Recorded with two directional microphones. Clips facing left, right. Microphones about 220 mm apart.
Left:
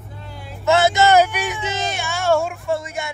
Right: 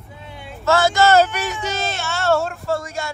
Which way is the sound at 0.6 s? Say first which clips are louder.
Left 1 dB; 20° left (ahead or behind).